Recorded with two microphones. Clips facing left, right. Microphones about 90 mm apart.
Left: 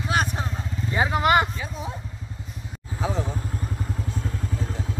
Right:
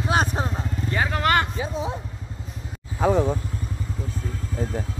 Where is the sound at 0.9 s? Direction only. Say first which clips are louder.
Left 2 dB; 15° left (ahead or behind).